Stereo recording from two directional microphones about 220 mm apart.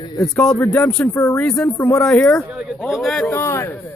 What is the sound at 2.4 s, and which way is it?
Speech, 5° right (ahead or behind).